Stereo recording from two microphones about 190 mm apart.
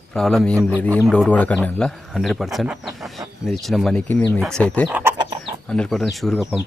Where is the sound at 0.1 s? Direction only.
Centre (ahead or behind).